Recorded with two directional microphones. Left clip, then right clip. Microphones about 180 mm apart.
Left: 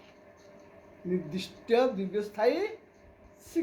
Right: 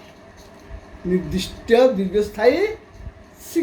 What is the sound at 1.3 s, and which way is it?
A woman's voice, 5° right (ahead or behind).